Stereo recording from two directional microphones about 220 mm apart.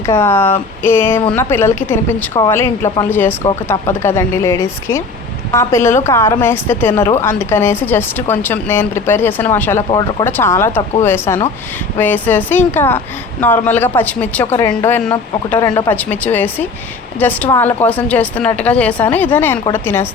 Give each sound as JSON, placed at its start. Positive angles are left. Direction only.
{"t": 0.0, "sound": "a woman's voice", "side_deg": 10}